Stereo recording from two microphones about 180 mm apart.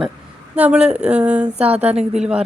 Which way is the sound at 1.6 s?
35° right (ahead or behind).